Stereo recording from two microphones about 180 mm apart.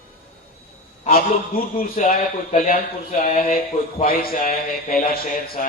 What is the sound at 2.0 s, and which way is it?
Speech, 45° left (ahead or behind).